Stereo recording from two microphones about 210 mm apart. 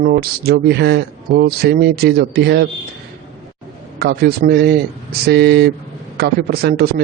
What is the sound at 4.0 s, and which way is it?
A man's voice, 50° right (ahead or behind).